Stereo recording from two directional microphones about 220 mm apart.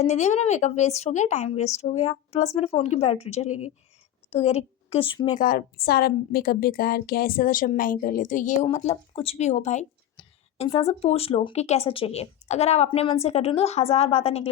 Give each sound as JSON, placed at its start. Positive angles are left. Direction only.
{"t": 0.0, "sound": "a woman's voice", "side_deg": 30}